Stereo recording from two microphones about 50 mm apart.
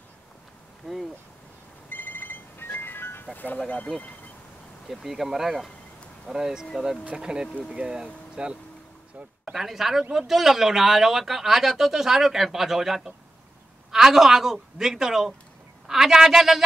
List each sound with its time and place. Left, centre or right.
0.8 s speech: centre
1.9 s music: left
3.5 s speech: left
4.8 s a woman's voice: centre
9.4 s a woman's voice: centre